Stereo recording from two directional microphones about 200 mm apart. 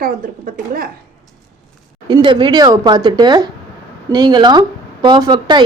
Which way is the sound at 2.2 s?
25° right (ahead or behind).